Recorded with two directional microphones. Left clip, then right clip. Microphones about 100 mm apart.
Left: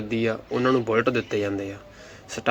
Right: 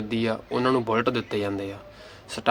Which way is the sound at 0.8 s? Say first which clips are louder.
Left 2 dB; 10° right (ahead or behind).